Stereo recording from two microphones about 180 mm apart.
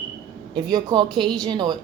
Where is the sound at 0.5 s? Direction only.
20° right (ahead or behind).